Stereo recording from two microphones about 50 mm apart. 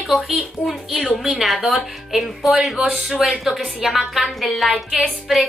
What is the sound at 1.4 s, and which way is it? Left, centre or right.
A woman's voice, centre.